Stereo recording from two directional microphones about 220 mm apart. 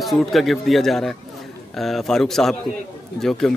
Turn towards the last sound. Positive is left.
turn(degrees=0)  # may be behind; listen again after turning